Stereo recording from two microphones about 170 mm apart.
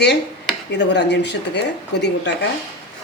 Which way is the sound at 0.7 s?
90° left.